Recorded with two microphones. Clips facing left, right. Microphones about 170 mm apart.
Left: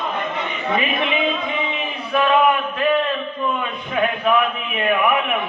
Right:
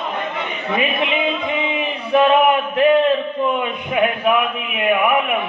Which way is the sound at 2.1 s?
20° right (ahead or behind).